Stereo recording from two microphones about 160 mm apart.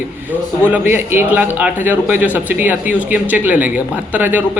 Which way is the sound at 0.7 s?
15° right (ahead or behind).